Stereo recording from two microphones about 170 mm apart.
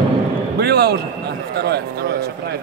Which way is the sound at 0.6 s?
70° right (ahead or behind).